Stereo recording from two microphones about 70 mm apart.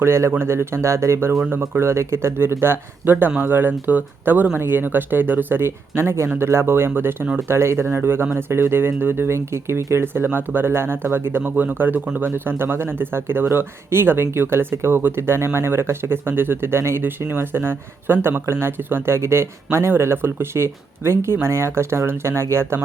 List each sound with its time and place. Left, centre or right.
0.0 s speech: right
1.5 s speech: right
1.8 s speech: right